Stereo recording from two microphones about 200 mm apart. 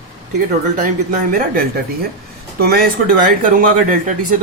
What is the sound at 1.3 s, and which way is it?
Speech, 50° right (ahead or behind).